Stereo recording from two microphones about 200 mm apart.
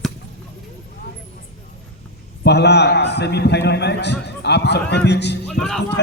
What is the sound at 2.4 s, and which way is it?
A man's voice, 60° left (ahead or behind).